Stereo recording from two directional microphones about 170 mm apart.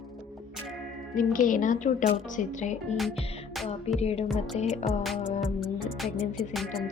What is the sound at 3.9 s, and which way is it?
Speech, 40° left (ahead or behind).